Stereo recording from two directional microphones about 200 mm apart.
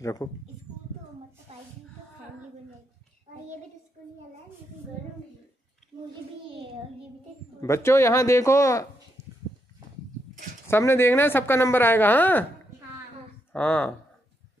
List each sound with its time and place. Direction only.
0.0 s speech: 15° left (ahead or behind)
1.5 s a sound: 30° right (ahead or behind)
7.6 s speech: 15° left (ahead or behind)
10.7 s speech: 10° left (ahead or behind)
13.5 s speech: 10° left (ahead or behind)